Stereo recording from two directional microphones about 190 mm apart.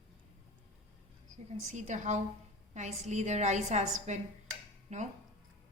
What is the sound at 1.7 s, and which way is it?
A woman's voice, 40° right (ahead or behind).